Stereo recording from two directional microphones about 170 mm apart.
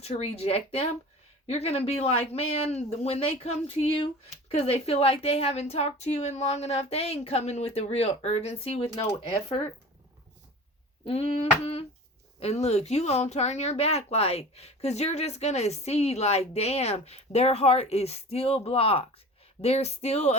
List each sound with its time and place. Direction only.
0.0 s speech: 35° left (ahead or behind)
11.0 s speech: 35° left (ahead or behind)